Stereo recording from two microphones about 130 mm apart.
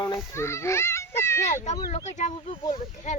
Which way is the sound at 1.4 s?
60° left (ahead or behind).